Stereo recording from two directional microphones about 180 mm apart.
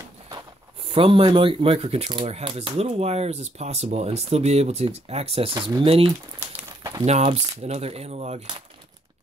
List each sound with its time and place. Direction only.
0.9 s speech: 30° right (ahead or behind)
6.8 s a sound: 20° right (ahead or behind)
7.1 s speech: 35° right (ahead or behind)